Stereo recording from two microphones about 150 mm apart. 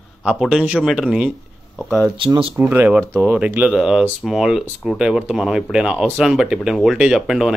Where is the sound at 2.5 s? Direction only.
10° right (ahead or behind).